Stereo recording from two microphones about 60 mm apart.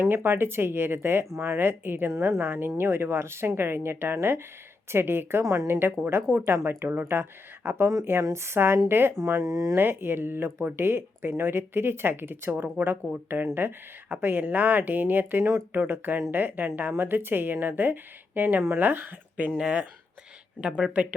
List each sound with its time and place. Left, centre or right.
0.0 s speech: right
9.1 s speech: right
9.5 s speech: right
9.7 s speech: right
19.5 s speech: centre